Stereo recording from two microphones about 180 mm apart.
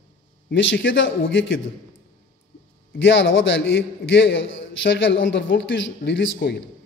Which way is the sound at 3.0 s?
90° left.